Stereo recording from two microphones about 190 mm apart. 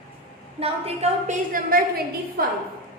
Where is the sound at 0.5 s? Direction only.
30° right (ahead or behind).